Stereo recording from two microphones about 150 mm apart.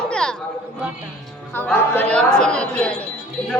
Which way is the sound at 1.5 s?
15° left (ahead or behind).